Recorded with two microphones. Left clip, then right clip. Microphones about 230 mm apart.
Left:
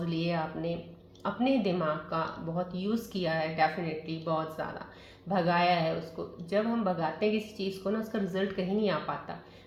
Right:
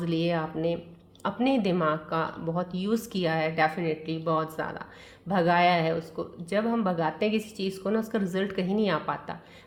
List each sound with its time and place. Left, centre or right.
0.0 s speech: right